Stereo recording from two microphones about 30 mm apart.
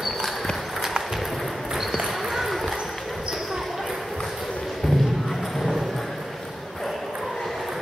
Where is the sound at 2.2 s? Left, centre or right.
Centre.